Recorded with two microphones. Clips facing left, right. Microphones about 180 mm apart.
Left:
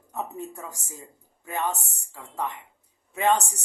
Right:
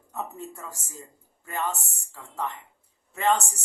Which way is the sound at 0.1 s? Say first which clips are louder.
Left 2 dB; 15° left (ahead or behind).